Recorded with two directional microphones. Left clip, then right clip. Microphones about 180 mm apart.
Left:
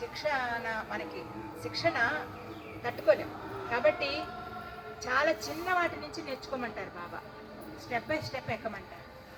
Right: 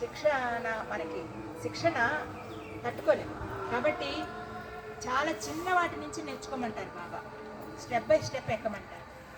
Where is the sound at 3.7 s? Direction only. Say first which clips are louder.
Left 3 dB; 65° right (ahead or behind).